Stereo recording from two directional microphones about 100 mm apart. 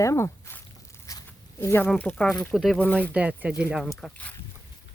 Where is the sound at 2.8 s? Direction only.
15° left (ahead or behind).